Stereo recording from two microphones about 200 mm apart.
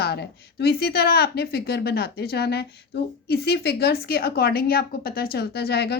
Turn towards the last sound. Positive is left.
turn(degrees=55)  # may be behind; listen again after turning